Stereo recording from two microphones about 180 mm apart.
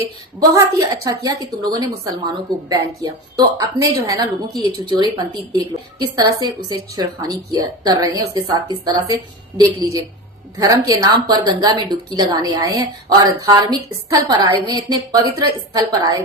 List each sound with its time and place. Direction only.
0.5 s a woman's voice: 20° right (ahead or behind)
10.6 s a woman's voice: 20° right (ahead or behind)